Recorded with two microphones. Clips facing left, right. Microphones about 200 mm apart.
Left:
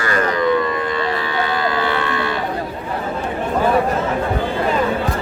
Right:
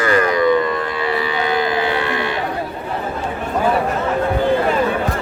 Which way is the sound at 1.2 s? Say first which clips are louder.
Right 2 dB; 15° right (ahead or behind).